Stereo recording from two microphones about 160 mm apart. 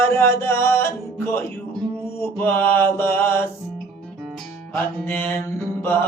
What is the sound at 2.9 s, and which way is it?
Mantra, 15° left (ahead or behind).